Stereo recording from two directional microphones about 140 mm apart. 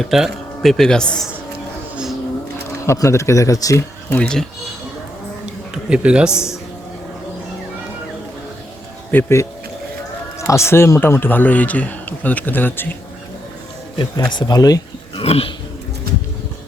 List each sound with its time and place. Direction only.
0.0 s speech: centre (ahead or behind)
2.8 s speech: 20° left (ahead or behind)
4.2 s speech: 5° left (ahead or behind)
5.7 s a man's voice: 5° right (ahead or behind)
9.1 s a man's voice: 20° left (ahead or behind)
13.9 s speech: 35° left (ahead or behind)
15.2 s speech: 45° left (ahead or behind)